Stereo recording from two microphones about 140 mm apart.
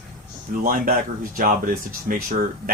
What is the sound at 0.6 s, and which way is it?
Speech, 85° right.